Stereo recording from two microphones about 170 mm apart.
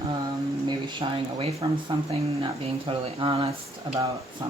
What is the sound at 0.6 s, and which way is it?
Speech, 30° right (ahead or behind).